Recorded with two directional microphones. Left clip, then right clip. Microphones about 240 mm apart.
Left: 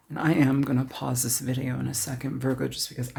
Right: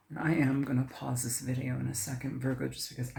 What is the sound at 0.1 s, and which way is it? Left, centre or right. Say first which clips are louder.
Speech: left 7 dB; left.